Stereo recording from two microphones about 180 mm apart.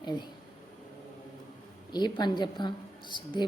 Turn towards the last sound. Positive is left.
turn(degrees=25)  # may be behind; listen again after turning